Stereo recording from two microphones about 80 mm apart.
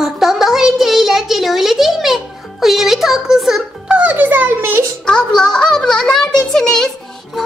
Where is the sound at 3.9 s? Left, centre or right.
Centre.